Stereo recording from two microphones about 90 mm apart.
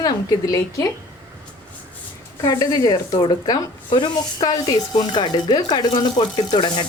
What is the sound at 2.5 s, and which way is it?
Speech, 50° left (ahead or behind).